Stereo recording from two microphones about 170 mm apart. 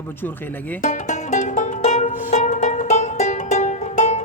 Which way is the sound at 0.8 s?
45° left (ahead or behind).